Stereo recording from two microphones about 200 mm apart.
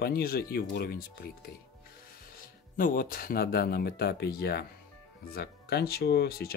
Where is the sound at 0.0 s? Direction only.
50° left (ahead or behind).